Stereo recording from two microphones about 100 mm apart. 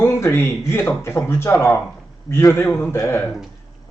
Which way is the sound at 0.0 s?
25° left (ahead or behind).